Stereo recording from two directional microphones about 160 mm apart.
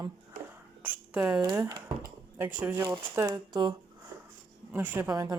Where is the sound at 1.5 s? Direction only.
20° right (ahead or behind).